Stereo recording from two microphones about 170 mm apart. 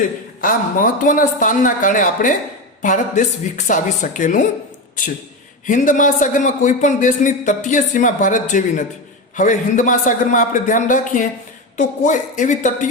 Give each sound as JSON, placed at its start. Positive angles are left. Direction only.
{"t": 0.4, "sound": "a man's voice", "side_deg": 55}
{"t": 5.6, "sound": "a man's voice", "side_deg": 50}